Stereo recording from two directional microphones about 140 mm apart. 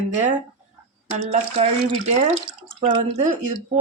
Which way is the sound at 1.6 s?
55° right (ahead or behind).